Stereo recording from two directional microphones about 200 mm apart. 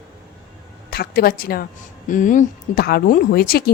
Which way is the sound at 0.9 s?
50° left (ahead or behind).